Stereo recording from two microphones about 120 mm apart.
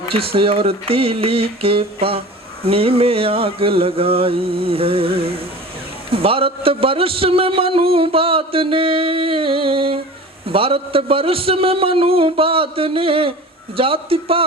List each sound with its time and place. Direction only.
0.1 s a man's voice: 50° right (ahead or behind)